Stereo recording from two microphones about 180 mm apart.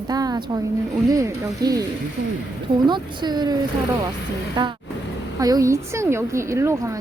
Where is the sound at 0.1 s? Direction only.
20° right (ahead or behind).